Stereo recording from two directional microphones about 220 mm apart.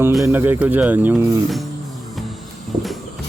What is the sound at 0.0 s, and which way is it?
Speech, 5° right (ahead or behind).